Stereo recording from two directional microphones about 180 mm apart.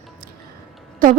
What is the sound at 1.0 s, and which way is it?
Speech, 50° right (ahead or behind).